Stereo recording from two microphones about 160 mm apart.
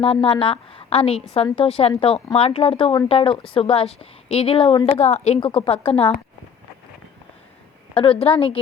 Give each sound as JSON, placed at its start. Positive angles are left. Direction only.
{"t": 0.0, "sound": "a woman's voice", "side_deg": 35}
{"t": 8.2, "sound": "a woman's voice", "side_deg": 35}